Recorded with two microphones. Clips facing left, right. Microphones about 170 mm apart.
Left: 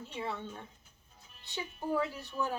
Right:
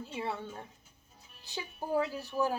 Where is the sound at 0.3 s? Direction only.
35° right (ahead or behind).